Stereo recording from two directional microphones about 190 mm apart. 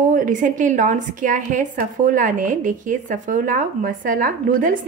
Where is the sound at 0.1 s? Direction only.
45° right (ahead or behind).